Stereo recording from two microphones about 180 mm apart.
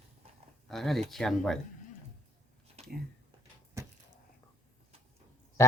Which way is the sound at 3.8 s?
15° right (ahead or behind).